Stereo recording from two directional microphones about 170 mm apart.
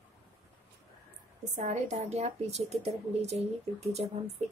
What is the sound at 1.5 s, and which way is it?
A woman's voice, 45° right (ahead or behind).